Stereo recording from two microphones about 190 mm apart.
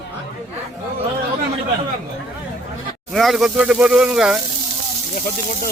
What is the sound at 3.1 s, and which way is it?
Speech, centre (ahead or behind).